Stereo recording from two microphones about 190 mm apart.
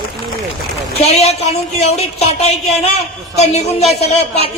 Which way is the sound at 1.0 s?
35° left (ahead or behind).